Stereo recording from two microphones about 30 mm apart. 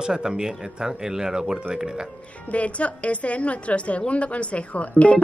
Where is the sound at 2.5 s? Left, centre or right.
Left.